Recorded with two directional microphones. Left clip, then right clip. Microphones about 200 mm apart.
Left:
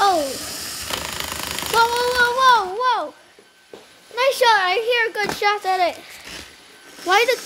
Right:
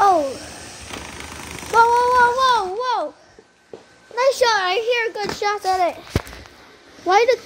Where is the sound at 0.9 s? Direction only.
45° left (ahead or behind).